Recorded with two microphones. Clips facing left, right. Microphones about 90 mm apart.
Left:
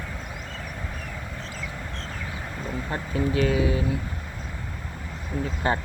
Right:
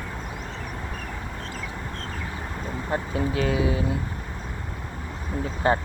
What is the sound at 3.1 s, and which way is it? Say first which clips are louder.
Speech: left 3 dB; 30° right (ahead or behind).